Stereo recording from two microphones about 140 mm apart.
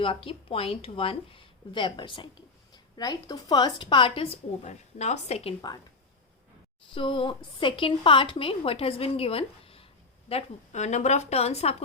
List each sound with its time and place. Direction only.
0.0 s a woman's voice: 40° left (ahead or behind)
6.9 s a woman's voice: 40° left (ahead or behind)